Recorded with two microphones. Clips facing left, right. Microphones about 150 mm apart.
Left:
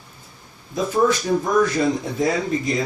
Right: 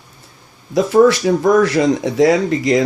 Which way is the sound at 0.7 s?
85° right.